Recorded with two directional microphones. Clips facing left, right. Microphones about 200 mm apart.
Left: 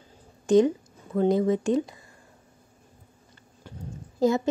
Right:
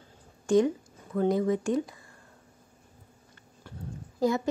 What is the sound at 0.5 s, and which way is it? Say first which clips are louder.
A woman's voice: left 4 dB; 20° left (ahead or behind).